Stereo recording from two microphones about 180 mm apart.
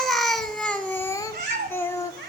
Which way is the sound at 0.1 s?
Centre (ahead or behind).